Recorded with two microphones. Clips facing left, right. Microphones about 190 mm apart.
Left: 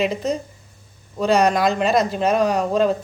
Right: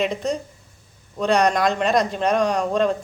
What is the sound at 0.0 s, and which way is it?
A man's voice, 5° left (ahead or behind).